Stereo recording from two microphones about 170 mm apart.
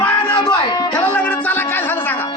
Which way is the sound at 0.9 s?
10° left (ahead or behind).